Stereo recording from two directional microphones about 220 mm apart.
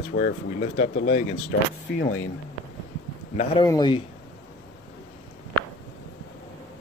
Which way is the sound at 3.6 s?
20° left (ahead or behind).